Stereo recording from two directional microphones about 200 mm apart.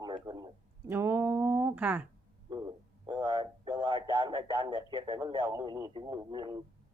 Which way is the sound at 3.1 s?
20° right (ahead or behind).